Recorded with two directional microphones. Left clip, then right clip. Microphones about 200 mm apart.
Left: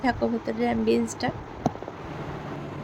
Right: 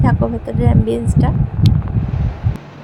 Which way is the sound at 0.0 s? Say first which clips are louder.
Right 6 dB; 10° right (ahead or behind).